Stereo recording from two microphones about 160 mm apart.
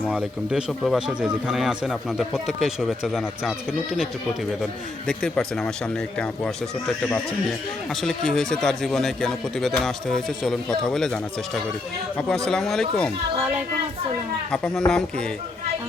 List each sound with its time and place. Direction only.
0.0 s a man's voice: 5° right (ahead or behind)
12.5 s a man's voice: centre (ahead or behind)
14.5 s a man's voice: 5° left (ahead or behind)